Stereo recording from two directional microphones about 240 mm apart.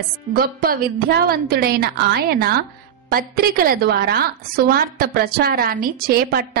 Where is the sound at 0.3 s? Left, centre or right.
Right.